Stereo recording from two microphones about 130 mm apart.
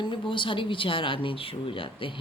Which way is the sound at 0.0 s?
40° left (ahead or behind).